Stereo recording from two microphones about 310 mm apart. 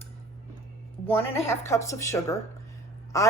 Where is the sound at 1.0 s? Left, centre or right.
Centre.